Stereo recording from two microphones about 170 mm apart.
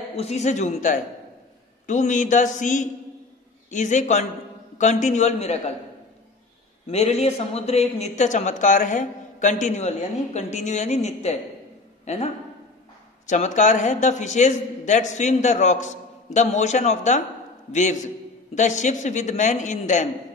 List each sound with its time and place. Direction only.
0.1 s a man's voice: 40° left (ahead or behind)
6.9 s a man's voice: 40° left (ahead or behind)
13.3 s a man's voice: 45° left (ahead or behind)